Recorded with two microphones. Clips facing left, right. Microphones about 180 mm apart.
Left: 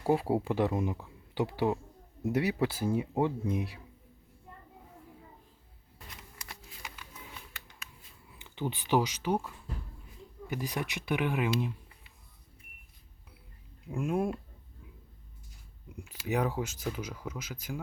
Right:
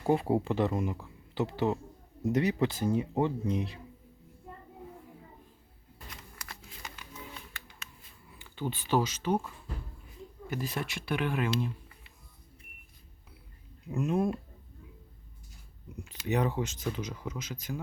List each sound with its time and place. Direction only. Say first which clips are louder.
0.0 s speech: right 1 dB; 5° left (ahead or behind)
6.5 s a sound: even; 10° left (ahead or behind)
8.4 s speech: even; 20° left (ahead or behind)
10.5 s speech: even; 15° left (ahead or behind)
13.9 s speech: right 2 dB; 10° left (ahead or behind)
16.0 s speech: right 1 dB; 10° left (ahead or behind)